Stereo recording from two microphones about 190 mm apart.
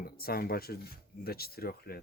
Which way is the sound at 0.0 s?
50° left (ahead or behind).